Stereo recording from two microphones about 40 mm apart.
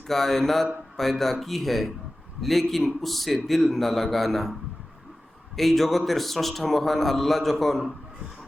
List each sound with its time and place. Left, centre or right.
0.1 s a man's voice: centre
5.5 s a man's voice: centre